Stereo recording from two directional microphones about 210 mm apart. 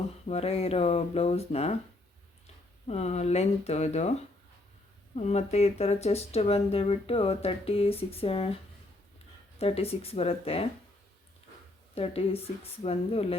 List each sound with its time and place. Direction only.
0.3 s speech: 30° left (ahead or behind)
2.8 s speech: 30° left (ahead or behind)
5.1 s speech: 30° left (ahead or behind)
9.6 s speech: 30° left (ahead or behind)
11.9 s speech: 30° left (ahead or behind)